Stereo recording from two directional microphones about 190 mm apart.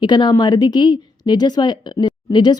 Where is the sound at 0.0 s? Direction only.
25° left (ahead or behind).